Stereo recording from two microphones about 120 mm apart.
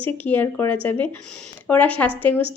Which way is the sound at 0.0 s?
15° left (ahead or behind).